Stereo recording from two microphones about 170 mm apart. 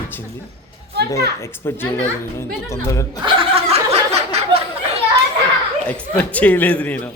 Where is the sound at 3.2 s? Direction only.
35° right (ahead or behind).